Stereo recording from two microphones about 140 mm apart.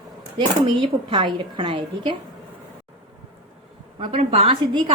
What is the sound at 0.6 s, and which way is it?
A woman's voice, 35° right (ahead or behind).